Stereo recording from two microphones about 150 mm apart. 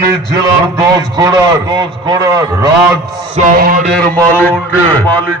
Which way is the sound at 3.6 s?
75° right (ahead or behind).